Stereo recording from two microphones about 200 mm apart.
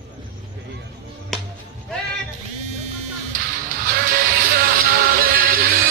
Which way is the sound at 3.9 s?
45° right (ahead or behind).